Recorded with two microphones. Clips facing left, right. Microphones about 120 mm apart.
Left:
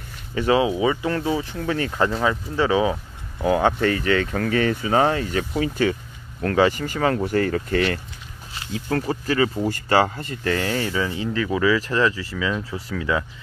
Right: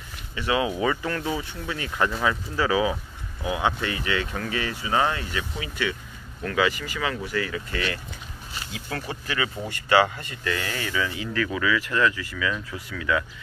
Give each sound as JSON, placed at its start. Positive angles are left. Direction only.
{"t": 0.3, "sound": "speech", "side_deg": 40}
{"t": 0.6, "sound": "speech", "side_deg": 20}
{"t": 3.4, "sound": "speech", "side_deg": 45}
{"t": 8.7, "sound": "speech", "side_deg": 40}